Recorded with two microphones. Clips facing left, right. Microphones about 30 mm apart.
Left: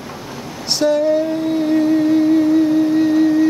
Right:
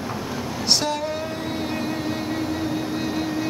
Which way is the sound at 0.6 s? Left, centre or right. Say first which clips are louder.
Left 8 dB; centre.